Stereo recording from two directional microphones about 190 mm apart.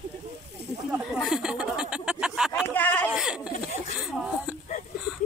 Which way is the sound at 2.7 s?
10° left (ahead or behind).